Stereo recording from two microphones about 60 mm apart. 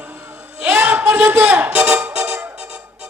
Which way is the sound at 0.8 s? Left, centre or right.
Right.